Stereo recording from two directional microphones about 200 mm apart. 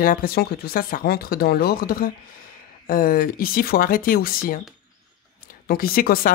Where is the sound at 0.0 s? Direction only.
45° left (ahead or behind).